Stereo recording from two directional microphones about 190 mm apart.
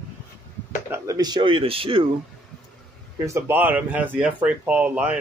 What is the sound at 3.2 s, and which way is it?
Speech, 10° right (ahead or behind).